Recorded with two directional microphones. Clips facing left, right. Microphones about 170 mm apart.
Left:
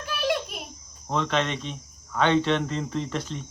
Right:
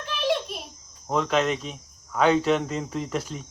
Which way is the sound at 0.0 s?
5° left (ahead or behind).